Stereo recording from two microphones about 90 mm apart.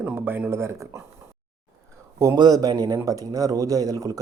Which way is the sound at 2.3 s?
50° right (ahead or behind).